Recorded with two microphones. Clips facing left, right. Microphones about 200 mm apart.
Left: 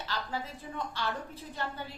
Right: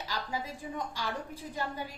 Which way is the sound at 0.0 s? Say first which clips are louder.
Even; 10° right (ahead or behind).